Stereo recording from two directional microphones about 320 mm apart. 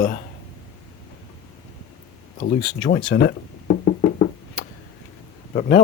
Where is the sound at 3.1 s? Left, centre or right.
Left.